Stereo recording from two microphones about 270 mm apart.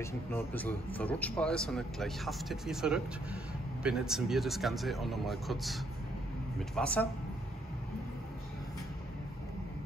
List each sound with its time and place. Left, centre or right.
0.0 s speech: centre